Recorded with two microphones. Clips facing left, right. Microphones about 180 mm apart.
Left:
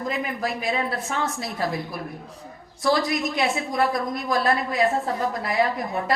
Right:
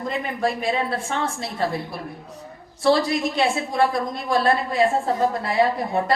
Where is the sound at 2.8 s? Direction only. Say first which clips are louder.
Right 3 dB; 30° right (ahead or behind).